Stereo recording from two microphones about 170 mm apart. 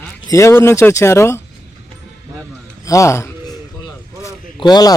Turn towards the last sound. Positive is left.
turn(degrees=25)  # may be behind; listen again after turning